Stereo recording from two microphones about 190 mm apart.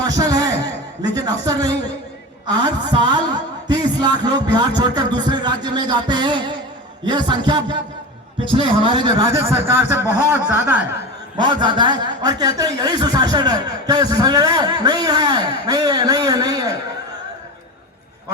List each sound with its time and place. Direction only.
0.0 s a man's voice: 20° right (ahead or behind)
3.7 s music: 20° right (ahead or behind)
4.8 s speech: 20° right (ahead or behind)
11.3 s speech: 25° right (ahead or behind)